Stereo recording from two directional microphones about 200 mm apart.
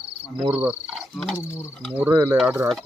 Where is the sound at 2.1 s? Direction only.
20° right (ahead or behind).